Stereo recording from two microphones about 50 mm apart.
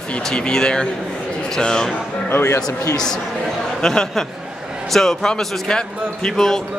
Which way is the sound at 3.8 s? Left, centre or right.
Centre.